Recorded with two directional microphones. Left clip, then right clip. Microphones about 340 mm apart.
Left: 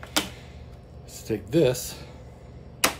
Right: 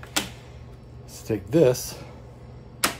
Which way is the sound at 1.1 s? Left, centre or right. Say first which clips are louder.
Right 2 dB; centre.